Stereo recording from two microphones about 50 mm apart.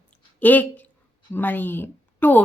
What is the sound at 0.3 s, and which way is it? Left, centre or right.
A woman's voice, left.